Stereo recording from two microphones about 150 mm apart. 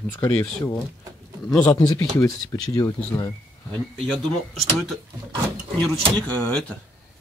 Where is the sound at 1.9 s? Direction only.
25° left (ahead or behind).